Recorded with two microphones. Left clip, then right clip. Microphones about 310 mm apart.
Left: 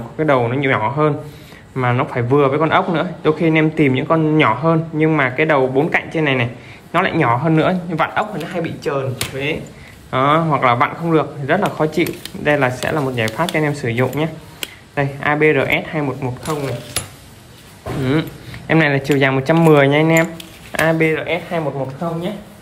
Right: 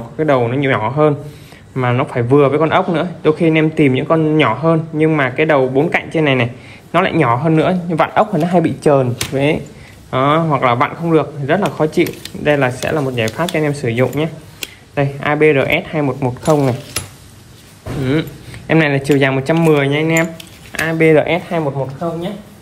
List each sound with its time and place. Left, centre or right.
0.2 s a man's voice: centre
17.0 s keys jangling: centre
18.7 s a man's voice: centre
21.0 s speech: centre
21.3 s speech: right